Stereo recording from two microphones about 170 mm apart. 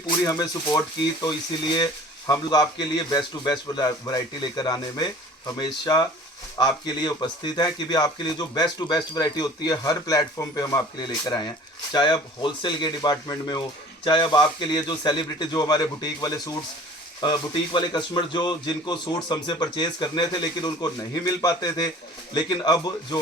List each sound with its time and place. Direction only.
0.2 s speech: 20° left (ahead or behind)
1.8 s speech: 20° left (ahead or behind)